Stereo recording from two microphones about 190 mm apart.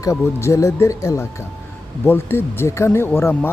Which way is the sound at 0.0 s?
15° left (ahead or behind).